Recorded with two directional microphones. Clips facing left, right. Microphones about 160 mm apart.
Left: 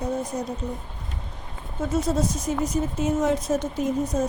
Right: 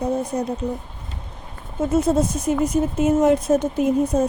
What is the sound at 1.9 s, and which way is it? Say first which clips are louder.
A woman's voice: right 5 dB; 55° right (ahead or behind).